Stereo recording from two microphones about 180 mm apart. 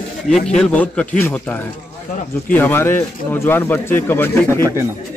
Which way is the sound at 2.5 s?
10° left (ahead or behind).